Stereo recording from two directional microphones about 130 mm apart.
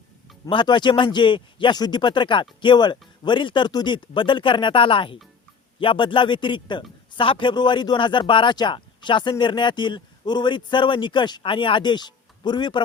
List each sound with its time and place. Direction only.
0.4 s a man's voice: 35° left (ahead or behind)